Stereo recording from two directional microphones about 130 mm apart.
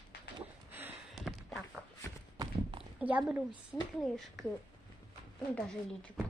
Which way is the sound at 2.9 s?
10° right (ahead or behind).